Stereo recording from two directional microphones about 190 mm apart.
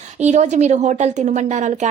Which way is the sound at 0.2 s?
40° right (ahead or behind).